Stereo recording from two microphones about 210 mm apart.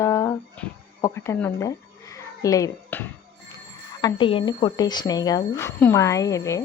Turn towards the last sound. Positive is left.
turn(degrees=15)  # may be behind; listen again after turning